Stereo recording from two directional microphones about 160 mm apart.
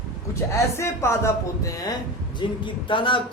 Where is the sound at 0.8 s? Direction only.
15° left (ahead or behind).